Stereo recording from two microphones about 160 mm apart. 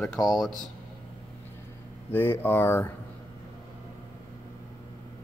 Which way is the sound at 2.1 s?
15° left (ahead or behind).